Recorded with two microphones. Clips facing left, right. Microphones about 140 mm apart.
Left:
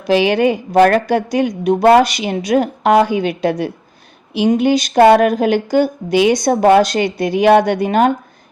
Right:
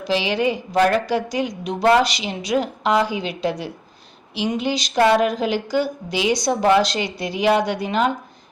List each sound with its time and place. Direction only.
0.1 s a woman's voice: 55° left (ahead or behind)